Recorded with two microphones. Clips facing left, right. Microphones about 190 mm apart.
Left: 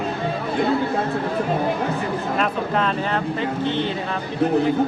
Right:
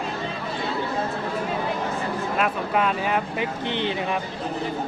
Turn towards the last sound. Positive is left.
turn(degrees=-15)  # may be behind; listen again after turning